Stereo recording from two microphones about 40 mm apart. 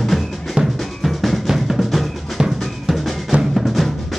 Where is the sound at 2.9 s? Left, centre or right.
Centre.